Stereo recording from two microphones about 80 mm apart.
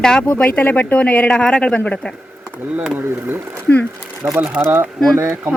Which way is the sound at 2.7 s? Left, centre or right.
Centre.